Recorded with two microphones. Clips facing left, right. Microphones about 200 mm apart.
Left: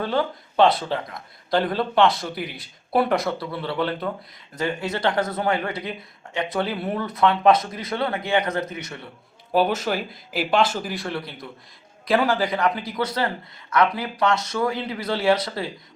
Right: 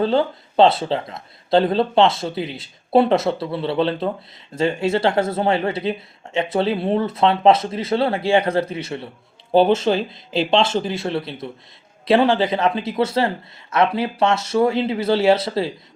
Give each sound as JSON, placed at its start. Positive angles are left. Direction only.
{"t": 0.0, "sound": "speech", "side_deg": -25}